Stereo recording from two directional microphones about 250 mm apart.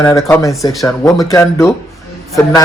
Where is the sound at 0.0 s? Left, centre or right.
Centre.